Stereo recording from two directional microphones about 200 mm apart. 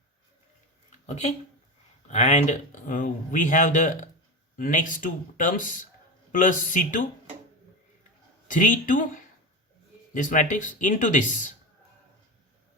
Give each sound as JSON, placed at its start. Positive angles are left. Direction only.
{"t": 0.9, "sound": "a sound", "side_deg": 35}
{"t": 2.0, "sound": "a man's voice", "side_deg": 35}
{"t": 8.4, "sound": "a man's voice", "side_deg": 40}
{"t": 10.2, "sound": "a man's voice", "side_deg": 40}